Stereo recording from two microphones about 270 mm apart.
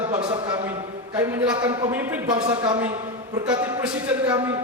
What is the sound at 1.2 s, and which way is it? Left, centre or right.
A woman's voice, centre.